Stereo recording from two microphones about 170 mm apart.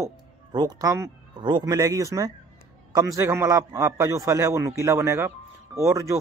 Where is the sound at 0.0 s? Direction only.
25° right (ahead or behind).